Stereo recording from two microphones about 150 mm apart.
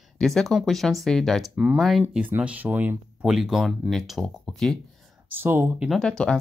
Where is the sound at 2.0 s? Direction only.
10° right (ahead or behind).